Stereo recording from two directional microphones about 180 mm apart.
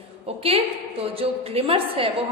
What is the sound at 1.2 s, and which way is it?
Speech, 30° right (ahead or behind).